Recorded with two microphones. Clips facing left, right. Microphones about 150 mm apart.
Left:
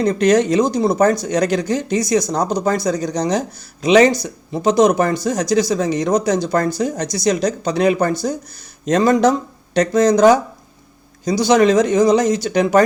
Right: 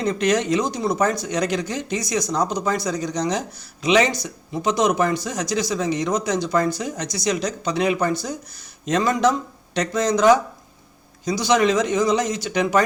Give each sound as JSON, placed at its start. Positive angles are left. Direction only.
{"t": 0.0, "sound": "speech", "side_deg": 40}